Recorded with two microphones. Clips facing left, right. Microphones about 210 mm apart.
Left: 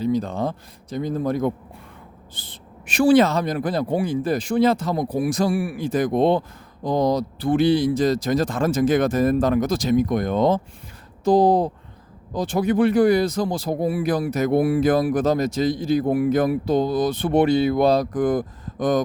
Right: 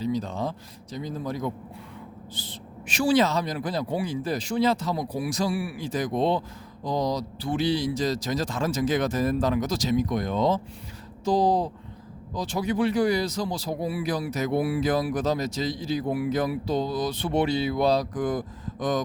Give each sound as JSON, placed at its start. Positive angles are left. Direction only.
{"t": 0.0, "sound": "speech", "side_deg": 55}